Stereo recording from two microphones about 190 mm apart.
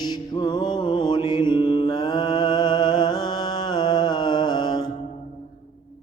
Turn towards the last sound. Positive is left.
turn(degrees=20)  # may be behind; listen again after turning